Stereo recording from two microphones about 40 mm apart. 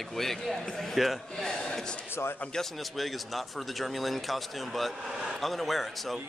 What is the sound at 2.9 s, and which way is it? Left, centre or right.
Speech, centre.